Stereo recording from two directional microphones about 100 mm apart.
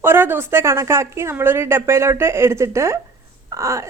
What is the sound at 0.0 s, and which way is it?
A woman's voice, 25° right (ahead or behind).